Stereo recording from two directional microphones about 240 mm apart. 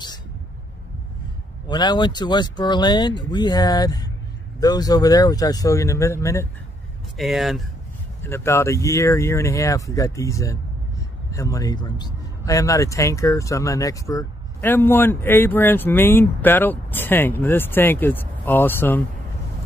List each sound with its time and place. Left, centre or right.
1.7 s speech: centre
7.2 s speech: centre
8.2 s speech: centre